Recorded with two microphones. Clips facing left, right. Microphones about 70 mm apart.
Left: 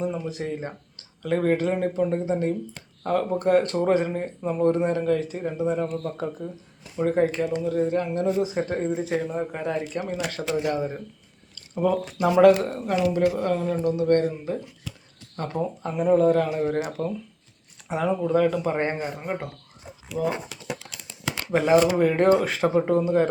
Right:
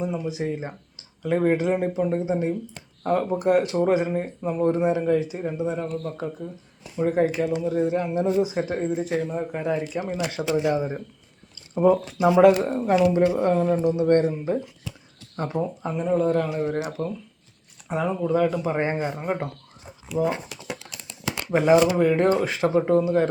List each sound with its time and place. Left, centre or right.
0.0 s speech: centre
12.8 s speech: right
13.7 s speech: centre
13.9 s speech: right
15.4 s speech: centre
15.6 s speech: centre
18.9 s speech: right
21.6 s speech: centre
21.9 s speech: centre